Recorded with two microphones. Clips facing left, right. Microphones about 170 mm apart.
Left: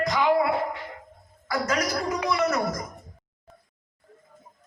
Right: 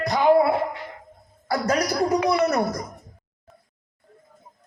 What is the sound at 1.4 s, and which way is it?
A man's voice, 35° right (ahead or behind).